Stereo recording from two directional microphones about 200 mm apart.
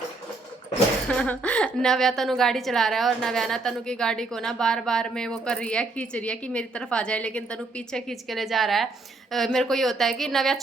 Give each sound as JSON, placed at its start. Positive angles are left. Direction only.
{"t": 1.0, "sound": "a woman's voice", "side_deg": 5}